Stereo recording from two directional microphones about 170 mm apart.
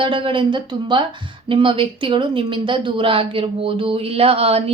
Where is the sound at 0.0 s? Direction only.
30° right (ahead or behind).